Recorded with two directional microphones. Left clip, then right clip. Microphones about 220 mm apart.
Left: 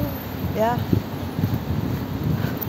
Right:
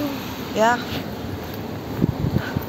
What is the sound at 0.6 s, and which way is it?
Speech, 10° right (ahead or behind).